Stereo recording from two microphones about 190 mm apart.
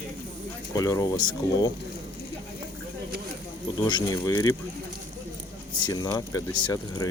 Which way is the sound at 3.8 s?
20° left (ahead or behind).